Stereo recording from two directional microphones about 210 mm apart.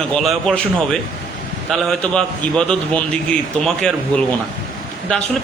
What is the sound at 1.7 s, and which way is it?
A man's voice, 5° left (ahead or behind).